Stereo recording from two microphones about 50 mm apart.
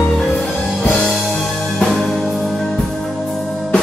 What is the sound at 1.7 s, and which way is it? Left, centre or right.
Music, centre.